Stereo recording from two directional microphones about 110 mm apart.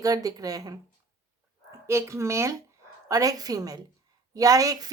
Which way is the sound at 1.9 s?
25° right (ahead or behind).